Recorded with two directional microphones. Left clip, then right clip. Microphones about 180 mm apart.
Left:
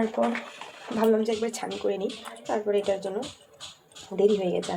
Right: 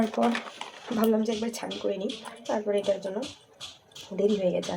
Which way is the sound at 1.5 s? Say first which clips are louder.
Left 2 dB; 5° right (ahead or behind).